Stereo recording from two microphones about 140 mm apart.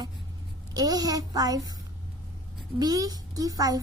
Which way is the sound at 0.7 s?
30° right (ahead or behind).